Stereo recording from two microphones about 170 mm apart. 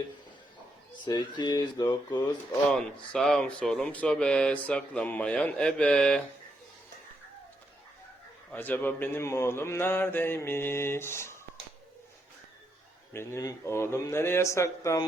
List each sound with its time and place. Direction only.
1.0 s speech: 25° left (ahead or behind)
2.6 s speech: 5° left (ahead or behind)
8.5 s speech: 10° left (ahead or behind)
13.1 s speech: 20° left (ahead or behind)